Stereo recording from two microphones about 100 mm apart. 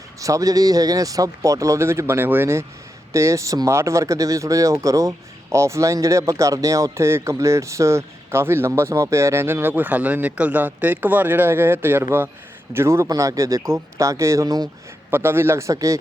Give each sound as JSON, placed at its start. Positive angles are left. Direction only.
{"t": 0.2, "sound": "a man's voice", "side_deg": -35}
{"t": 15.1, "sound": "speech", "side_deg": -25}